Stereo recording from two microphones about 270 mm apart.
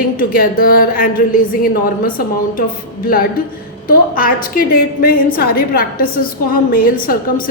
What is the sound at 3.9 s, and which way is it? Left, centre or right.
A woman's voice, left.